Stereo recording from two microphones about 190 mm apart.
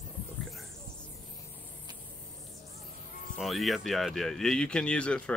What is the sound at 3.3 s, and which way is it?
Speech, centre (ahead or behind).